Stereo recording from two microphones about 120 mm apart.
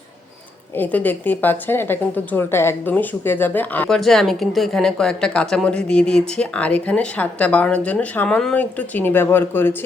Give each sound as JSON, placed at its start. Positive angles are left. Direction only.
{"t": 0.8, "sound": "speech", "side_deg": 15}
{"t": 3.8, "sound": "speech", "side_deg": 5}
{"t": 9.0, "sound": "speech", "side_deg": 15}